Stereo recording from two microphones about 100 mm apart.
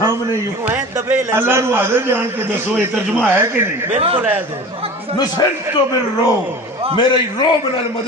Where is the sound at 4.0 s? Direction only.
75° right (ahead or behind).